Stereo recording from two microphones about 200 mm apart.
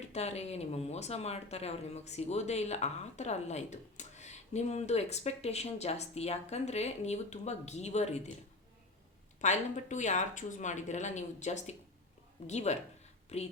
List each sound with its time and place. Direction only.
0.1 s speech: 30° left (ahead or behind)
9.4 s speech: 35° left (ahead or behind)